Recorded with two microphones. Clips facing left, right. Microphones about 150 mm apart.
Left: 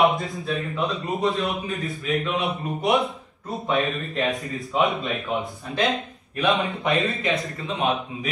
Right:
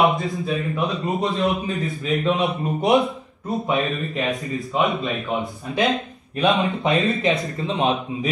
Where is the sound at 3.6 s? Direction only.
Centre (ahead or behind).